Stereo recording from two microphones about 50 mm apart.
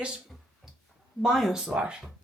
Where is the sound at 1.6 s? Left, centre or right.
Centre.